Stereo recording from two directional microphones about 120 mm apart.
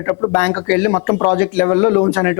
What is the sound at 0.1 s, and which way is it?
Speech, 25° left (ahead or behind).